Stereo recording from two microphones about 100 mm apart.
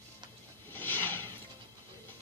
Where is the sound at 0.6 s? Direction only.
20° left (ahead or behind).